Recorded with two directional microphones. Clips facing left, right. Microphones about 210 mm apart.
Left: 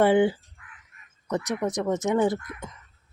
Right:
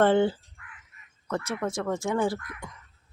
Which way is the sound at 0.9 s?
50° left (ahead or behind).